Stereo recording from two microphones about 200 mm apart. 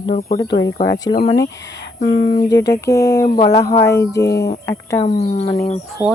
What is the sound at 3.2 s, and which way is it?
Speech, 40° left (ahead or behind).